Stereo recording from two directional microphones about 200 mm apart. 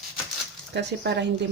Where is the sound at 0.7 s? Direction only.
60° right (ahead or behind).